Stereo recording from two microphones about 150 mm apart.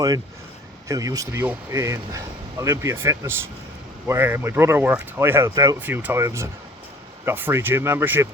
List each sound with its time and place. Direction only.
0.9 s speech: 25° right (ahead or behind)
5.8 s speech: 10° right (ahead or behind)